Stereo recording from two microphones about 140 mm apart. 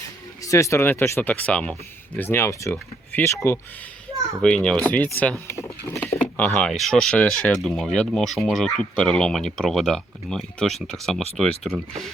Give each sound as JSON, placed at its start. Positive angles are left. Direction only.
{"t": 0.4, "sound": "speech", "side_deg": 20}
{"t": 4.4, "sound": "speech", "side_deg": 5}